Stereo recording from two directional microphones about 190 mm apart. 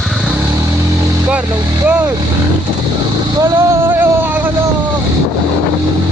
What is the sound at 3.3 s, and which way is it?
Vehicle, 15° right (ahead or behind).